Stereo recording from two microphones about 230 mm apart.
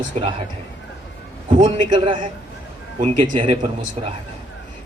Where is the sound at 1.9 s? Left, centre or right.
Right.